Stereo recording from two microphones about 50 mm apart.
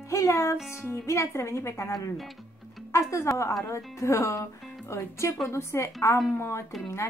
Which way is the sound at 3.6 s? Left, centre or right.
Left.